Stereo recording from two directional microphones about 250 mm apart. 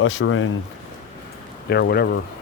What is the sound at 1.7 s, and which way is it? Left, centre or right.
Speech, left.